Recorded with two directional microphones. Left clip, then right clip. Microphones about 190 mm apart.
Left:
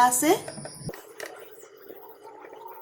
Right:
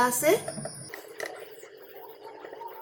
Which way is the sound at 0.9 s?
5° left (ahead or behind).